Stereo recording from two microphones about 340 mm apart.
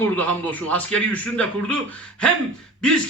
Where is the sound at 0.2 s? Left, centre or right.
Centre.